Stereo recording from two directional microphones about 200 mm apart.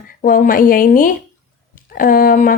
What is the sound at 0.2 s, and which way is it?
A woman's voice, 45° left (ahead or behind).